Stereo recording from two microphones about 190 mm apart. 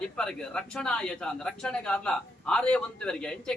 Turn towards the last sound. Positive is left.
turn(degrees=5)  # may be behind; listen again after turning